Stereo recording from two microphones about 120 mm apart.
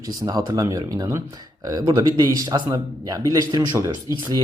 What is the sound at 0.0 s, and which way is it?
Speech, 30° right (ahead or behind).